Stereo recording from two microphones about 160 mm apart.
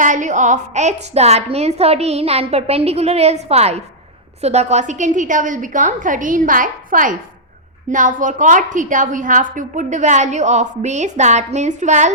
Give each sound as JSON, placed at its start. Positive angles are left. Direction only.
{"t": 0.0, "sound": "a woman's voice", "side_deg": -50}